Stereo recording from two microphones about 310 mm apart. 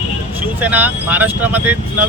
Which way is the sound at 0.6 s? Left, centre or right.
Centre.